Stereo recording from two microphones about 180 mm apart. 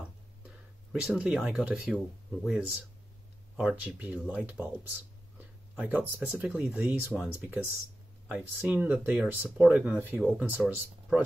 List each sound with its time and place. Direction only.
0.9 s speech: 5° right (ahead or behind)